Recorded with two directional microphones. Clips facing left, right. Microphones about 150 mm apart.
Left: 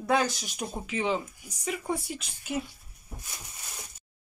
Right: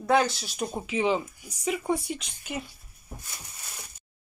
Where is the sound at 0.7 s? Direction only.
5° right (ahead or behind).